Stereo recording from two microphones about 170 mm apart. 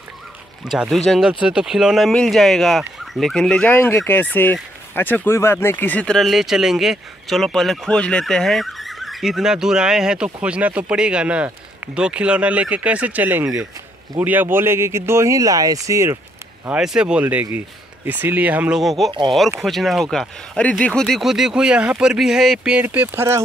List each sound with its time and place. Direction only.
0.7 s speech: centre (ahead or behind); by 16.2 s 15° right (ahead or behind)
16.6 s speech: 5° right (ahead or behind)